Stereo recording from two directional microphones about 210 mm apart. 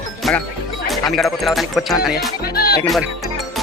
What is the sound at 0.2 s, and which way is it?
Music, centre (ahead or behind).